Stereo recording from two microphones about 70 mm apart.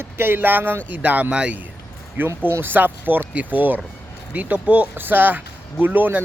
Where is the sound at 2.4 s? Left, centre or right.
Right.